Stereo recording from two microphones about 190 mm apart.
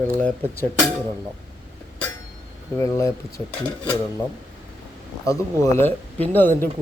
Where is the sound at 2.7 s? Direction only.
15° left (ahead or behind).